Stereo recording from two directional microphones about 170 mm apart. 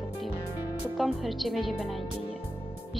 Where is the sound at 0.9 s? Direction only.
Centre (ahead or behind).